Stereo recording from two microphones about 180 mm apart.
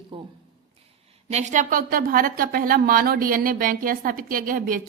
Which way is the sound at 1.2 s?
40° right (ahead or behind).